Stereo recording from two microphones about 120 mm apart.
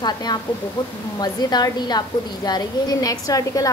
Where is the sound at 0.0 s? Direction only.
35° left (ahead or behind).